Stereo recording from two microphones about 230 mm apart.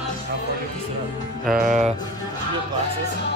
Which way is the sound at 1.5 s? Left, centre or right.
Right.